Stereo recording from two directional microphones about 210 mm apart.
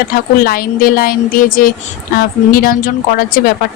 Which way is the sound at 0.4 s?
45° left (ahead or behind).